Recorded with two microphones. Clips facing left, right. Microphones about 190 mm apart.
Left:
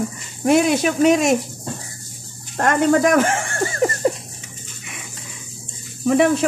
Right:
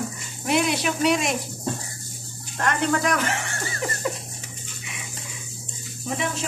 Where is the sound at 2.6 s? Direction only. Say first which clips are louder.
Left 8 dB; 45° left (ahead or behind).